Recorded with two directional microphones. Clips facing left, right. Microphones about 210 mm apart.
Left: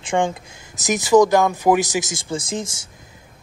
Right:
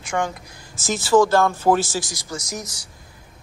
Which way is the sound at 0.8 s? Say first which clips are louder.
Left 3 dB; 15° left (ahead or behind).